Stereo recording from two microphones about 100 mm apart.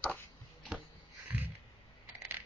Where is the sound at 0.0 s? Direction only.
15° left (ahead or behind).